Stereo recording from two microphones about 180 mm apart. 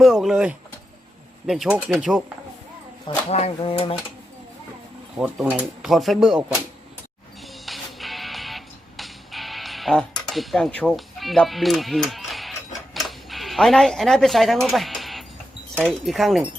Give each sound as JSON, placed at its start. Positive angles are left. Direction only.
{"t": 0.0, "sound": "speech", "side_deg": 0}
{"t": 3.2, "sound": "speech", "side_deg": 35}
{"t": 5.2, "sound": "speech", "side_deg": -5}
{"t": 7.4, "sound": "music", "side_deg": 0}
{"t": 15.7, "sound": "speech", "side_deg": 0}